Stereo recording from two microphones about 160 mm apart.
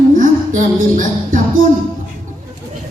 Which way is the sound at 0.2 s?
55° right (ahead or behind).